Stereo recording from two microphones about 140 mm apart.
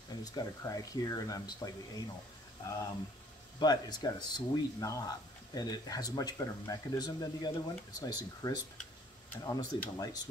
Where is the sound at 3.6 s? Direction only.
30° left (ahead or behind).